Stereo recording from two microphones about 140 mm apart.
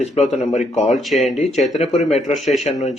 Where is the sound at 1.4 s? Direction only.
55° left (ahead or behind).